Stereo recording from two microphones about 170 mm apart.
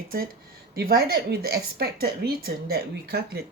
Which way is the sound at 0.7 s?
65° right (ahead or behind).